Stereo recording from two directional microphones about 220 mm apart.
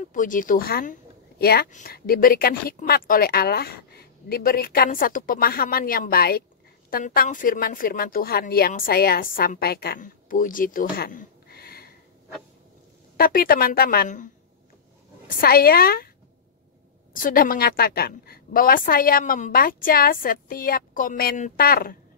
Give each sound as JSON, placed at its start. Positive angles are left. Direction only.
{"t": 0.1, "sound": "a woman's voice", "side_deg": 35}
{"t": 13.2, "sound": "a woman's voice", "side_deg": 40}
{"t": 15.2, "sound": "a woman's voice", "side_deg": 45}
{"t": 17.1, "sound": "a woman's voice", "side_deg": 40}